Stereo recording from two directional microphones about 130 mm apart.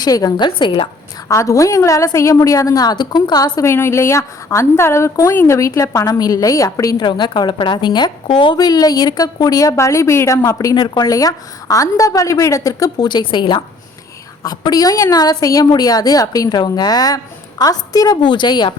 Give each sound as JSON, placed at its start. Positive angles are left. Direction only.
{"t": 0.0, "sound": "a woman's voice", "side_deg": 30}
{"t": 1.3, "sound": "a woman's voice", "side_deg": 25}
{"t": 7.0, "sound": "a woman's voice", "side_deg": 35}